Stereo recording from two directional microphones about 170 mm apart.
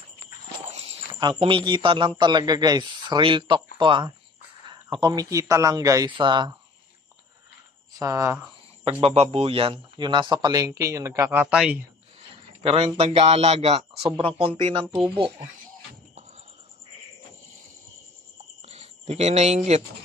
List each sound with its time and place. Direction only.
0.7 s walk: 35° right (ahead or behind)
1.2 s speech: 30° right (ahead or behind)
8.0 s speech: 20° right (ahead or behind)
9.0 s speech: 40° right (ahead or behind); by 11.8 s 5° right (ahead or behind)
12.6 s speech: 35° right (ahead or behind)
18.6 s a sound: 40° right (ahead or behind)